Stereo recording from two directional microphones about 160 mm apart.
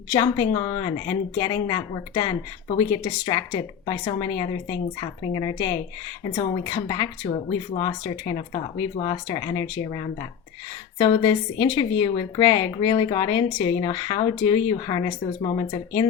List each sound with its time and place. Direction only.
0.1 s speech: 25° left (ahead or behind)